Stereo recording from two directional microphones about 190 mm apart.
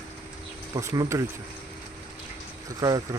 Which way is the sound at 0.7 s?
15° right (ahead or behind).